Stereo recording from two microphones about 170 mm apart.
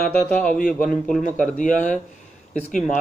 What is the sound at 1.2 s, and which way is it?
Speech, 50° left (ahead or behind).